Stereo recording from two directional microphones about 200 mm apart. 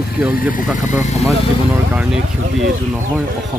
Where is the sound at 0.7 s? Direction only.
35° left (ahead or behind).